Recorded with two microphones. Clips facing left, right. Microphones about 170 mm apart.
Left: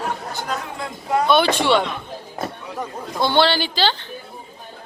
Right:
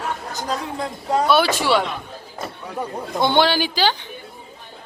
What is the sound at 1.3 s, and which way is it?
Speech, 5° right (ahead or behind).